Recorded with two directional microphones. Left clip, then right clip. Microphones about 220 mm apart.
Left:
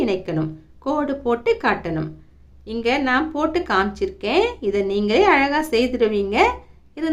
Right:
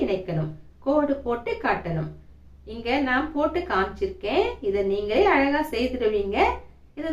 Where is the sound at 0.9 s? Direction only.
50° left (ahead or behind).